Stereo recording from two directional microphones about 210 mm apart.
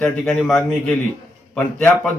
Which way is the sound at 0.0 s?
5° left (ahead or behind).